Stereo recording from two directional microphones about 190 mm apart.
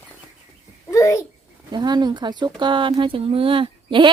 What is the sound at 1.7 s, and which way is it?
Speech, 20° right (ahead or behind).